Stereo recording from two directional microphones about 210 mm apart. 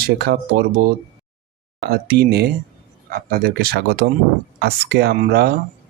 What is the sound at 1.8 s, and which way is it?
Speech, 45° right (ahead or behind).